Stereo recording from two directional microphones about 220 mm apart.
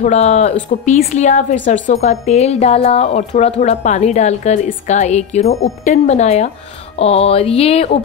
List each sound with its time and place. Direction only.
0.0 s speech: 30° left (ahead or behind)